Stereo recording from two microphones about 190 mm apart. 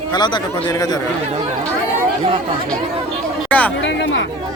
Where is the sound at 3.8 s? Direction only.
70° left (ahead or behind).